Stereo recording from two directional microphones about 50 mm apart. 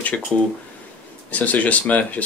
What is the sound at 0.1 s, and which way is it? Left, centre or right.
Speech, left.